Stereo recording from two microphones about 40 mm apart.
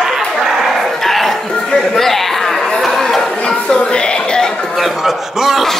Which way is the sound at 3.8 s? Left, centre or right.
Left.